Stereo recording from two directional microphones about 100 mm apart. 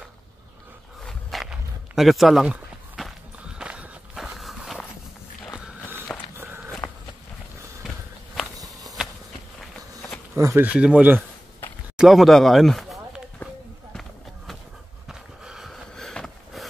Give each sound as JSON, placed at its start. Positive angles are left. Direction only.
{"t": 1.0, "sound": "walk", "side_deg": 0}
{"t": 6.3, "sound": "walk", "side_deg": -20}
{"t": 6.8, "sound": "walk", "side_deg": 20}
{"t": 8.6, "sound": "walk", "side_deg": 0}
{"t": 10.3, "sound": "speech", "side_deg": -25}
{"t": 10.7, "sound": "speech", "side_deg": -10}
{"t": 12.0, "sound": "speech", "side_deg": 0}
{"t": 13.4, "sound": "a sound", "side_deg": 15}
{"t": 15.0, "sound": "a sound", "side_deg": -5}